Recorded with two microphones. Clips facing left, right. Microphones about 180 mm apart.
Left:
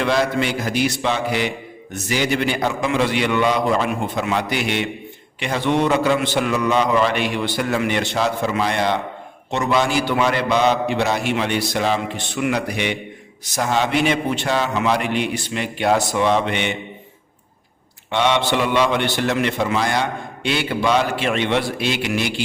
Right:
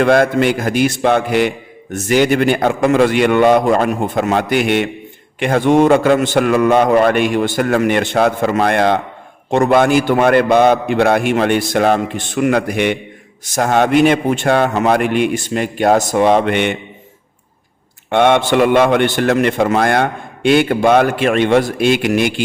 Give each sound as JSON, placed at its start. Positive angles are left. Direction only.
{"t": 0.0, "sound": "a man's voice", "side_deg": -50}
{"t": 18.1, "sound": "a man's voice", "side_deg": -55}